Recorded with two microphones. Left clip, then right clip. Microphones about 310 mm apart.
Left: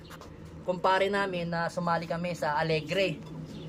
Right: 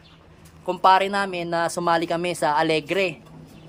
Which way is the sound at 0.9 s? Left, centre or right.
Centre.